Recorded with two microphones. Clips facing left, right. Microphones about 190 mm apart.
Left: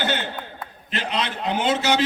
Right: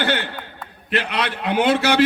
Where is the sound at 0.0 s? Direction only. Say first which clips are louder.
Right 3 dB; 60° right (ahead or behind).